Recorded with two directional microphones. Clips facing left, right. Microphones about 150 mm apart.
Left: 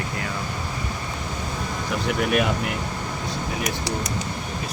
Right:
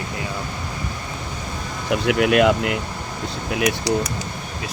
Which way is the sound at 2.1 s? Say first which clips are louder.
Right 6 dB; 90° right.